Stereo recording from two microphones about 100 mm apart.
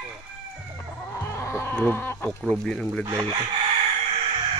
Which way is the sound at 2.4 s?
5° left (ahead or behind).